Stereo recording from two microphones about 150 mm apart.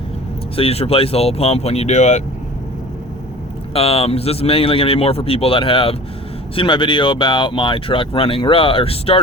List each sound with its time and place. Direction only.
0.5 s speech: 40° left (ahead or behind)
3.8 s speech: 40° left (ahead or behind)